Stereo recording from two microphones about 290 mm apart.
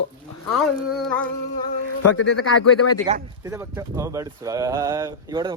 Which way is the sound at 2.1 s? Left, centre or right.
Left.